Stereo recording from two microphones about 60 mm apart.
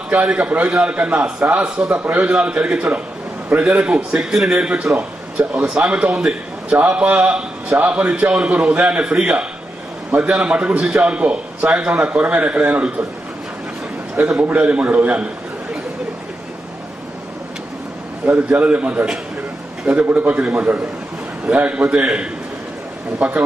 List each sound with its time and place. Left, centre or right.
0.1 s a man's voice: right
9.0 s a man's voice: centre
14.3 s a man's voice: right
18.2 s a man's voice: right
21.5 s a man's voice: right